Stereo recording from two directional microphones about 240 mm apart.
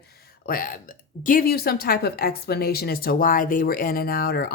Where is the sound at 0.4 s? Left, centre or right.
Left.